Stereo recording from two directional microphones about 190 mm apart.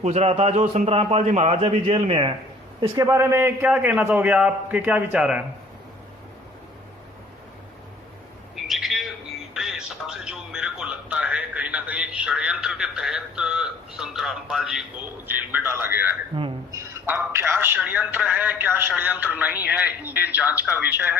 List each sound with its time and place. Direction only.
0.0 s a man's voice: 35° right (ahead or behind); by 5.4 s 5° right (ahead or behind)
8.5 s bird: centre (ahead or behind)
9.6 s music: centre (ahead or behind)
15.3 s a man's voice: 10° right (ahead or behind)